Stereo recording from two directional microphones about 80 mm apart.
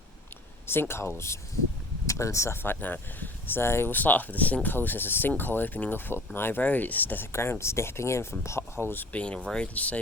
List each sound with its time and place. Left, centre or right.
0.7 s speech: left
9.1 s speech: centre